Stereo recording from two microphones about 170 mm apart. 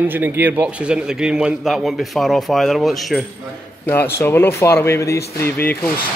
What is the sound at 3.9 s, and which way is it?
Speech, 15° left (ahead or behind).